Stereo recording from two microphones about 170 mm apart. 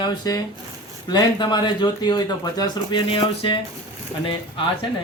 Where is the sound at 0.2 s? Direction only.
20° left (ahead or behind).